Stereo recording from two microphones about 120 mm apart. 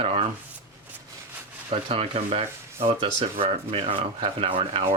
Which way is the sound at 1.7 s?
55° right (ahead or behind).